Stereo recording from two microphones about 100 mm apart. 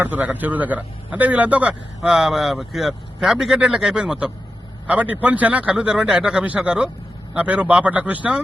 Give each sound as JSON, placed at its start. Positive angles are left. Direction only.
{"t": 0.0, "sound": "speech", "side_deg": -15}